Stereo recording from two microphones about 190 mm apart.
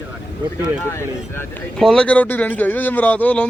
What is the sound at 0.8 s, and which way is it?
A man's voice, 10° left (ahead or behind).